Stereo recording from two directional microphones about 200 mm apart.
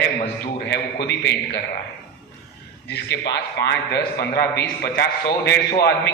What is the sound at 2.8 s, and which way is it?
A man's voice, 55° left (ahead or behind).